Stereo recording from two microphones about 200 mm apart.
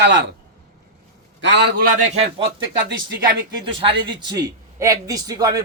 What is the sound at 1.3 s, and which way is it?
Speech, 65° right (ahead or behind).